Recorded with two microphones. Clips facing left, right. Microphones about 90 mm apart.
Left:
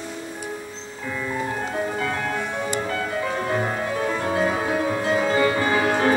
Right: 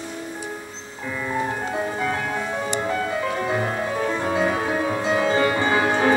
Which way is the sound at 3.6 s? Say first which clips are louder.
Even; centre (ahead or behind).